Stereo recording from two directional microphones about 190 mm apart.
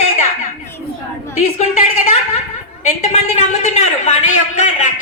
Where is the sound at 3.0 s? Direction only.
40° left (ahead or behind).